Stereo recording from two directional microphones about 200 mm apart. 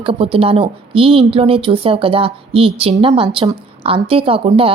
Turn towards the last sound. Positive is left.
turn(degrees=-25)  # may be behind; listen again after turning